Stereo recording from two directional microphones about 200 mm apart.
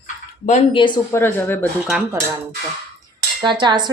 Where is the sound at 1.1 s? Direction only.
10° left (ahead or behind).